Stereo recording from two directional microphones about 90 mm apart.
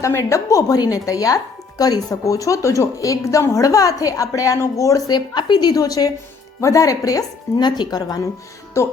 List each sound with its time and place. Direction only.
0.0 s a woman's voice: 35° left (ahead or behind)
8.8 s a woman's voice: 35° left (ahead or behind)